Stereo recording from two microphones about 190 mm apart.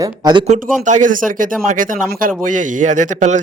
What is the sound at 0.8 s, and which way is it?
Speech, 40° right (ahead or behind).